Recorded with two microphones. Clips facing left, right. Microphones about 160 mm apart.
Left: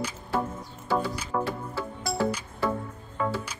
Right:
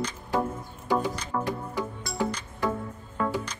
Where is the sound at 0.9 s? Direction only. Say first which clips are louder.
Right 1 dB; 15° right (ahead or behind).